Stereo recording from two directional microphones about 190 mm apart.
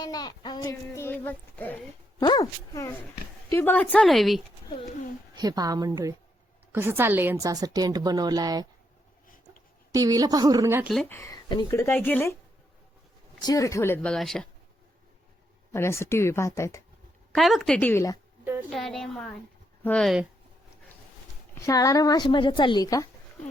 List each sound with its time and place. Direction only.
0.0 s speech: 20° left (ahead or behind)
2.2 s speech: 20° left (ahead or behind); by 4.4 s centre (ahead or behind)
5.4 s a woman's voice: 20° right (ahead or behind)
9.9 s a woman's voice: 20° right (ahead or behind)
10.8 s a woman's voice: centre (ahead or behind)
11.1 s speech: 15° left (ahead or behind)
13.4 s speech: 20° left (ahead or behind); by 14.4 s centre (ahead or behind)
15.7 s speech: 15° left (ahead or behind)
17.3 s speech: centre (ahead or behind)
18.7 s a woman's voice: centre (ahead or behind)
21.5 s speech: 15° left (ahead or behind)